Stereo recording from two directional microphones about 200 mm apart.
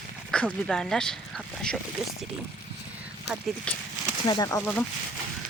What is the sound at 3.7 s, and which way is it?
Speech, 5° left (ahead or behind).